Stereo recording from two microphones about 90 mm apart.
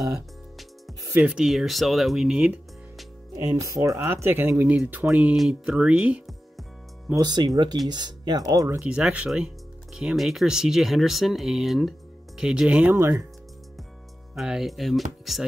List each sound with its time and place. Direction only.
1.2 s speech: 5° right (ahead or behind)
3.3 s speech: 35° right (ahead or behind)
4.1 s speech: 25° right (ahead or behind)
5.1 s speech: 5° right (ahead or behind)
7.2 s speech: 50° right (ahead or behind)
8.8 s speech: 10° right (ahead or behind)
12.9 s speech: 30° right (ahead or behind)
14.3 s speech: 5° right (ahead or behind)